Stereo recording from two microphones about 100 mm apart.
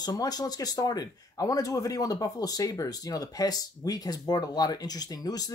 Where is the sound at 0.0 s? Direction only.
40° left (ahead or behind).